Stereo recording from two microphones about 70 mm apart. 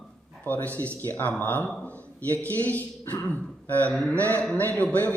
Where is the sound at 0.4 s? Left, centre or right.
Left.